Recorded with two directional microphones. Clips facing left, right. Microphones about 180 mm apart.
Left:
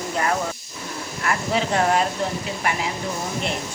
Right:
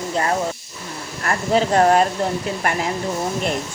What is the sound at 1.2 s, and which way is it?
Speech, 45° right (ahead or behind).